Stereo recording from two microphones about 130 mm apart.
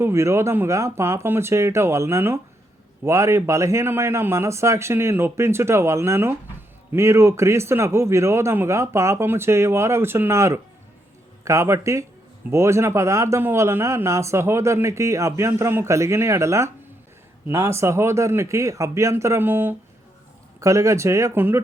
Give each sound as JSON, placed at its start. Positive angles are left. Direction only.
{"t": 0.0, "sound": "speech", "side_deg": -20}